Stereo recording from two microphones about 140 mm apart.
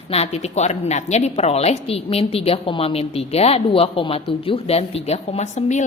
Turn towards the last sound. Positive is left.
turn(degrees=55)  # may be behind; listen again after turning